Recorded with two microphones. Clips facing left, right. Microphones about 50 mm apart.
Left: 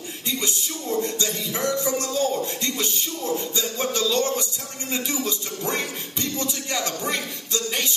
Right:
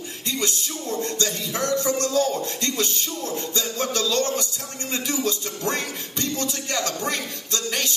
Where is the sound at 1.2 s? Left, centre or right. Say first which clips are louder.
Even; right.